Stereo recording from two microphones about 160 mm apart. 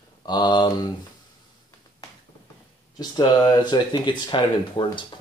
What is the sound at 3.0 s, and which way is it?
Speech, 25° left (ahead or behind).